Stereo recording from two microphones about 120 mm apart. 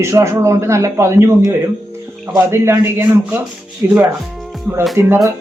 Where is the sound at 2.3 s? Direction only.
20° right (ahead or behind).